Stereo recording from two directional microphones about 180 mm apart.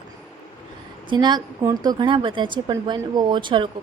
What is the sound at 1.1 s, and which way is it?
Speech, 25° right (ahead or behind).